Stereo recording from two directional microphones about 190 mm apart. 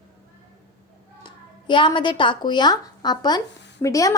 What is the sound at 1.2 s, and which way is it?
A woman's voice, 25° left (ahead or behind).